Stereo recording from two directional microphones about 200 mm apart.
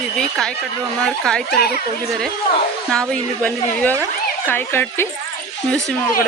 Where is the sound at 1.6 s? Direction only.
50° left (ahead or behind).